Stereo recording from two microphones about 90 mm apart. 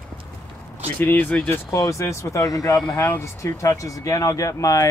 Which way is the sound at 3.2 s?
35° left (ahead or behind).